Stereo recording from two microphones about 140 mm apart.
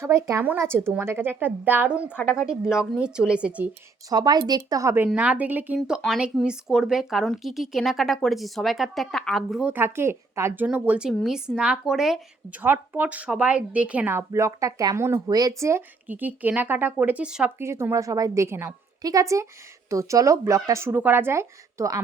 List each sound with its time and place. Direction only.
0.0 s speech: 20° right (ahead or behind)
4.1 s speech: 30° right (ahead or behind)
5.0 s speech: 10° right (ahead or behind)
12.6 s speech: 15° right (ahead or behind)
17.6 s speech: 20° right (ahead or behind)